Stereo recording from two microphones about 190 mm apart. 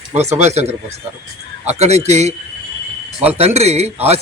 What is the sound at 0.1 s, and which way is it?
Speech, 35° right (ahead or behind).